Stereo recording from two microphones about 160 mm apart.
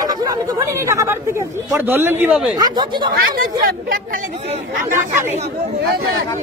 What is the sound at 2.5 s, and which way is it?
Speech, 25° right (ahead or behind).